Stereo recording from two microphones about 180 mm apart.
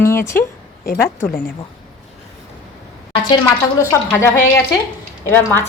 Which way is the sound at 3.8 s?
15° left (ahead or behind).